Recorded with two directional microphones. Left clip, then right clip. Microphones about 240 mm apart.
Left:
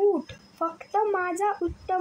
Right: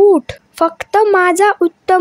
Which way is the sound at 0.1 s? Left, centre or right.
Right.